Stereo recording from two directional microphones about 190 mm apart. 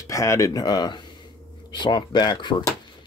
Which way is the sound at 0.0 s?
15° left (ahead or behind).